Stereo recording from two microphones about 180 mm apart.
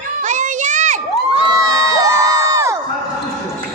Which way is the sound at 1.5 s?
20° right (ahead or behind).